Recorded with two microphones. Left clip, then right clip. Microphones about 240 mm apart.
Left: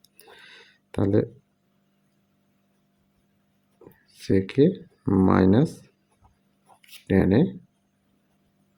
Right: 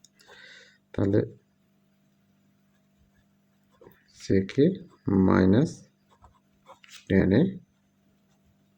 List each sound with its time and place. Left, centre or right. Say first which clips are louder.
0.2 s a sound: left 1 dB; centre
4.2 s speech: left 3 dB; centre
7.1 s speech: left 2 dB; centre